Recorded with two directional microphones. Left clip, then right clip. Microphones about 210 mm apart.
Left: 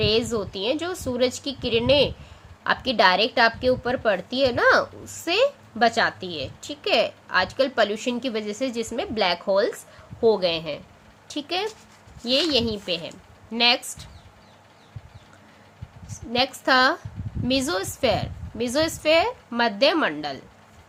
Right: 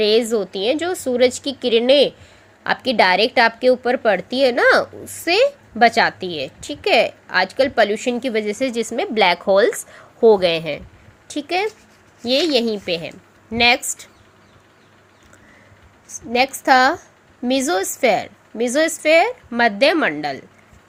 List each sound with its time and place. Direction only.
0.0 s a woman's voice: 20° right (ahead or behind)
16.0 s a woman's voice: 20° right (ahead or behind)